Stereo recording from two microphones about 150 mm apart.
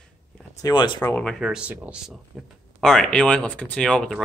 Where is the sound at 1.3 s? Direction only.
5° right (ahead or behind).